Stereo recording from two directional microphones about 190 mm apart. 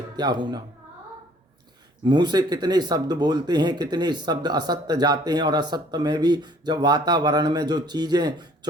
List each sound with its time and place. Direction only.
0.2 s speech: 25° right (ahead or behind)
2.0 s speech: 25° right (ahead or behind)